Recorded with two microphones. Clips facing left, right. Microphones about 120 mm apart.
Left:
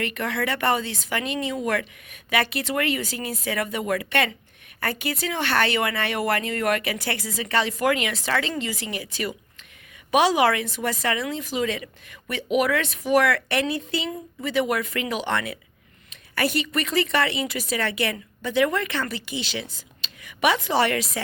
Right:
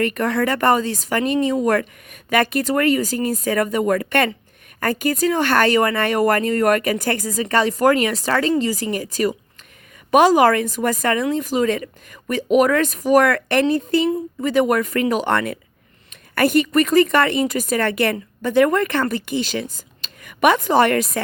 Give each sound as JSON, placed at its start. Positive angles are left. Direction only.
{"t": 0.0, "sound": "a woman's voice", "side_deg": -45}